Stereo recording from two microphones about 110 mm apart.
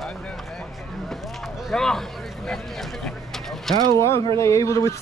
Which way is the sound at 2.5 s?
5° left (ahead or behind).